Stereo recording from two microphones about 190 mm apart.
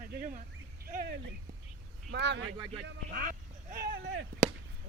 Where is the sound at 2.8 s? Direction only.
50° right (ahead or behind).